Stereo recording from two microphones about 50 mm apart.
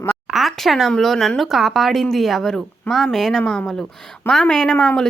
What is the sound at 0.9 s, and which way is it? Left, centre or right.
A woman's voice, centre.